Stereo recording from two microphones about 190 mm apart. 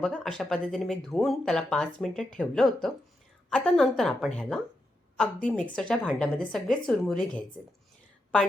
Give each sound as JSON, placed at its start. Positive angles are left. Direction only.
{"t": 0.0, "sound": "speech", "side_deg": 5}